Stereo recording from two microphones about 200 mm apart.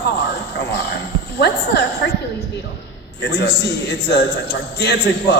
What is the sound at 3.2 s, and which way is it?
A man's voice, 55° left (ahead or behind).